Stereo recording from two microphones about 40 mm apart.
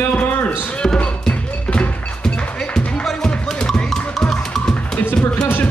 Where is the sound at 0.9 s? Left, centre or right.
Left.